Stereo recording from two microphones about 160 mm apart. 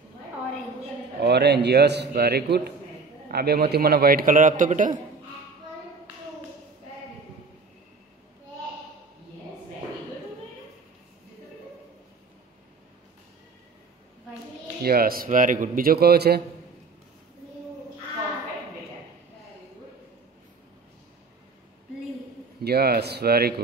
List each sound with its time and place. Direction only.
1.2 s a man's voice: 90° right
3.3 s a man's voice: 75° right (ahead or behind); by 4.9 s 55° right (ahead or behind)
14.8 s a man's voice: 70° right (ahead or behind)
22.6 s speech: 80° right